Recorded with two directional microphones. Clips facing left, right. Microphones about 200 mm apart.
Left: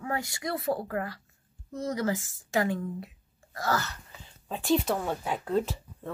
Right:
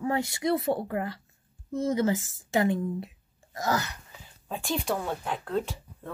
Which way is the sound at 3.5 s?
15° right (ahead or behind).